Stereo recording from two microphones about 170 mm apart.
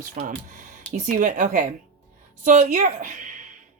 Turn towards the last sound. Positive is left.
turn(degrees=-45)  # may be behind; listen again after turning